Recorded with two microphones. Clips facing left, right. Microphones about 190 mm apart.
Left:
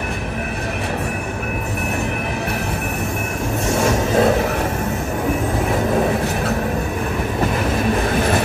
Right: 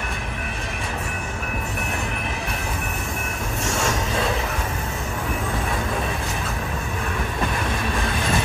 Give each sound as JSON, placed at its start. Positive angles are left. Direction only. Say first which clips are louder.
{"t": 3.8, "sound": "music", "louder": "left 10 dB", "side_deg": 50}